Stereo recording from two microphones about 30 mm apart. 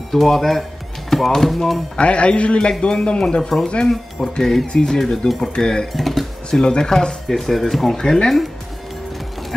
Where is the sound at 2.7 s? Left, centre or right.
Centre.